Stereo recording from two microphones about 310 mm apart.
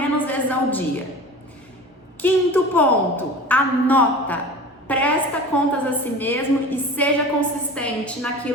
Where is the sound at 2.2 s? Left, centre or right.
Centre.